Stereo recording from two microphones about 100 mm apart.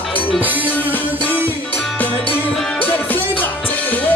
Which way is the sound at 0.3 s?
15° right (ahead or behind).